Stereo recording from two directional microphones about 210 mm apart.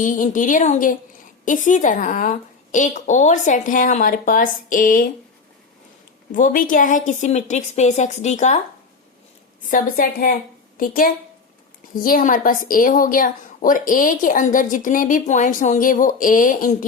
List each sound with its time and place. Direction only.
0.0 s a woman's voice: 40° left (ahead or behind)
6.3 s a woman's voice: 40° left (ahead or behind)
9.6 s a woman's voice: 40° left (ahead or behind)